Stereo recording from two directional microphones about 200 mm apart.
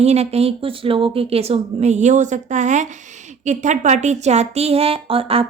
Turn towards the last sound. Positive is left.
turn(degrees=-30)  # may be behind; listen again after turning